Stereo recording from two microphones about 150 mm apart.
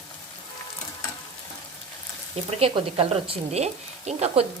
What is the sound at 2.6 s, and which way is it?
Speech, 40° right (ahead or behind).